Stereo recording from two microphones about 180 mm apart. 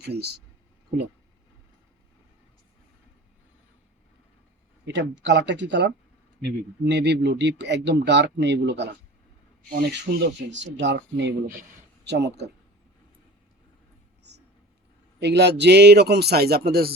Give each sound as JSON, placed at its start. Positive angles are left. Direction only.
{"t": 0.0, "sound": "a man's voice", "side_deg": -65}
{"t": 4.9, "sound": "speech", "side_deg": -80}
{"t": 9.7, "sound": "speech", "side_deg": -60}
{"t": 15.2, "sound": "a man's voice", "side_deg": -70}